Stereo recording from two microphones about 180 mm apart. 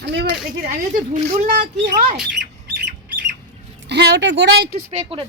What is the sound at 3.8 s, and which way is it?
Speech, 70° right (ahead or behind).